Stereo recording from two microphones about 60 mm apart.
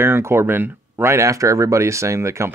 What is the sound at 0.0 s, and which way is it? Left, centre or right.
Speech, right.